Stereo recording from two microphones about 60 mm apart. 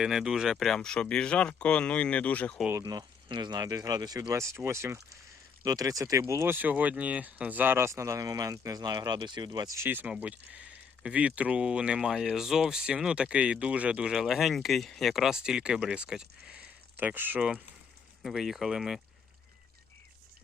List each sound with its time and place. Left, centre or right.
0.0 s speech: centre
0.6 s speech: centre
2.7 s speech: right
4.3 s speech: right
5.6 s speech: right
6.1 s speech: right
6.5 s speech: right
7.9 s speech: right
9.8 s speech: right
10.1 s speech: right; by 15.1 s centre
15.1 s speech: centre
17.0 s speech: right
18.2 s speech: centre